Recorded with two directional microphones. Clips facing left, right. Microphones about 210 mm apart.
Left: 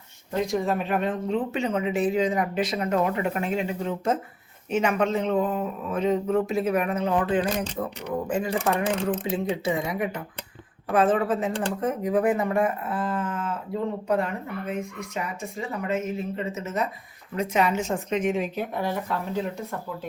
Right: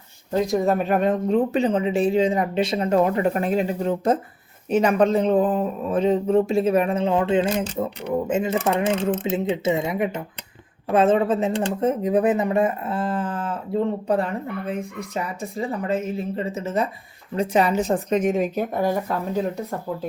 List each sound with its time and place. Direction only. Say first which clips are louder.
0.3 s speech: right 5 dB; 40° right (ahead or behind)